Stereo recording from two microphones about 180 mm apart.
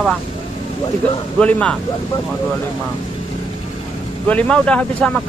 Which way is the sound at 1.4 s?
5° left (ahead or behind).